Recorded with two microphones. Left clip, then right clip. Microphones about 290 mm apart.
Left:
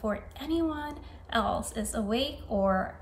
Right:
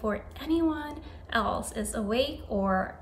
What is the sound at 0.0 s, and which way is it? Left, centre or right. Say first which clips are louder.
A woman's voice: right 1 dB; centre.